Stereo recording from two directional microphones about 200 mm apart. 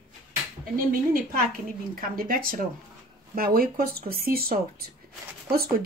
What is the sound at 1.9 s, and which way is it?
Speech, 45° right (ahead or behind).